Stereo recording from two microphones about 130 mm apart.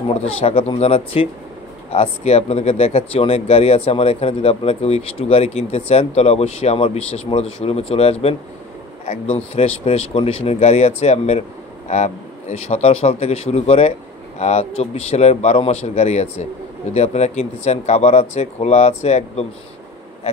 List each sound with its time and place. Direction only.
0.1 s speech: 50° left (ahead or behind)